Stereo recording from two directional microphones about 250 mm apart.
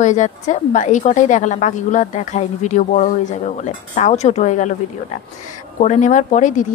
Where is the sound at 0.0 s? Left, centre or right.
Left.